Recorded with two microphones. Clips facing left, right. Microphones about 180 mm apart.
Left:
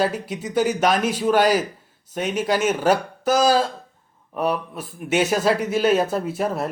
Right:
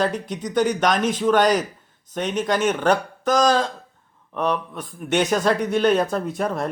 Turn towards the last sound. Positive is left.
turn(degrees=5)  # may be behind; listen again after turning